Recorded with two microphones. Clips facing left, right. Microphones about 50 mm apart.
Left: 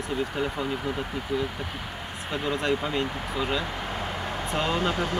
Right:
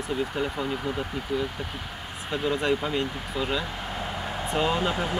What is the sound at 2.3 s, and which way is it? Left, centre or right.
Speech, centre.